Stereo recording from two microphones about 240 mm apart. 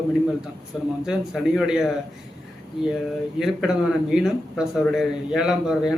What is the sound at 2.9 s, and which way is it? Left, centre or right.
Speech, centre.